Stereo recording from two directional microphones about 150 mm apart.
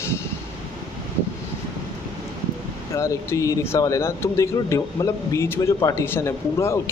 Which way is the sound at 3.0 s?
20° left (ahead or behind).